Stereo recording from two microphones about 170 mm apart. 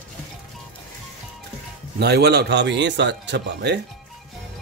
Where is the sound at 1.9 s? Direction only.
75° right (ahead or behind); by 3.8 s 90° right.